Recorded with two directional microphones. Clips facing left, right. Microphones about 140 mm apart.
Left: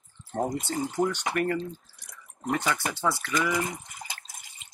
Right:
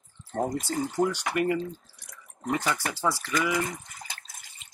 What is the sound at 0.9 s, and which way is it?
Speech, 10° right (ahead or behind).